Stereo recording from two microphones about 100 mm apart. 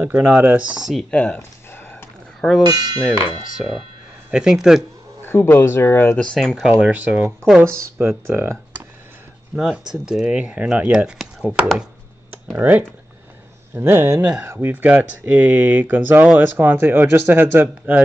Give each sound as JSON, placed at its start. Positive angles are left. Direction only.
{"t": 0.0, "sound": "speech", "side_deg": -15}
{"t": 1.1, "sound": "a sound", "side_deg": 10}
{"t": 2.6, "sound": "speech", "side_deg": -40}
{"t": 3.5, "sound": "speech", "side_deg": 0}
{"t": 5.2, "sound": "speech", "side_deg": 20}
{"t": 6.1, "sound": "speech", "side_deg": 10}
{"t": 6.6, "sound": "speech", "side_deg": -15}
{"t": 9.6, "sound": "speech", "side_deg": -5}
{"t": 12.5, "sound": "speech", "side_deg": -20}